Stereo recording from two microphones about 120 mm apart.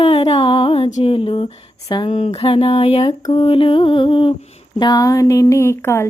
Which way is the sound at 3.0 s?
35° left (ahead or behind).